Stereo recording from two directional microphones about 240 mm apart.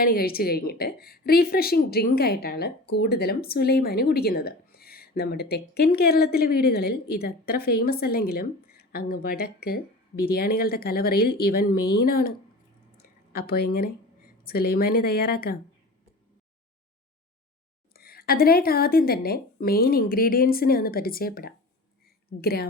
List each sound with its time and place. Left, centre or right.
0.0 s a woman's voice: left
13.0 s a sound: left
14.4 s a woman's voice: left
17.9 s a woman's voice: left